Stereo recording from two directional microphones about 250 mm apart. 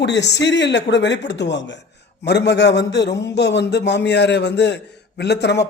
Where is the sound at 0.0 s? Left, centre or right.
Left.